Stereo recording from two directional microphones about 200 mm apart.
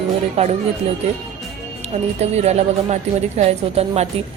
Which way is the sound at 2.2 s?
30° right (ahead or behind).